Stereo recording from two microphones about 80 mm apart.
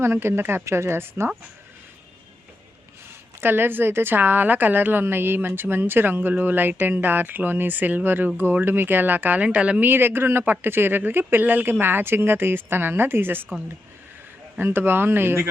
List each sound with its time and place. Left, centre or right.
0.0 s a woman's voice: right
3.4 s speech: right
14.6 s speech: right